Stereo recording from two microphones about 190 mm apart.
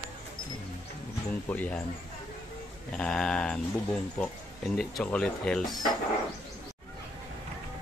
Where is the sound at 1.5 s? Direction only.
10° left (ahead or behind).